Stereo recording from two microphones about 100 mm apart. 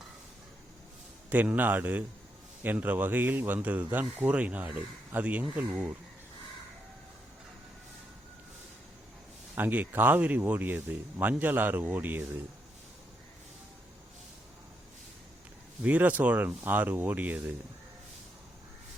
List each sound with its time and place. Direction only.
1.3 s speech: 15° right (ahead or behind)
9.6 s speech: 20° right (ahead or behind)
15.8 s speech: 15° right (ahead or behind)